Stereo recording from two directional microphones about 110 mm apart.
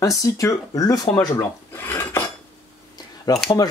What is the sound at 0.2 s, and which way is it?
Speech, 30° left (ahead or behind).